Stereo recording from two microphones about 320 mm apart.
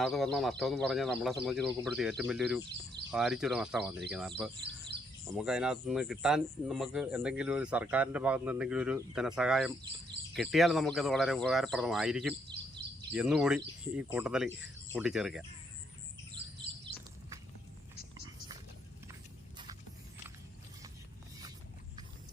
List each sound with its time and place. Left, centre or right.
0.0 s speech: centre
4.9 s bird: right
5.3 s speech: centre